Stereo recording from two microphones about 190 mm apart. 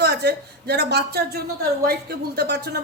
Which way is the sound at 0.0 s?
60° right (ahead or behind).